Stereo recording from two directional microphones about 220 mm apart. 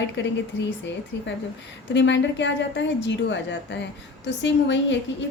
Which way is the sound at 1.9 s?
55° left (ahead or behind).